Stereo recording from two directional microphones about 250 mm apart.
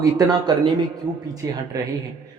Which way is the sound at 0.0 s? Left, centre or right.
Centre.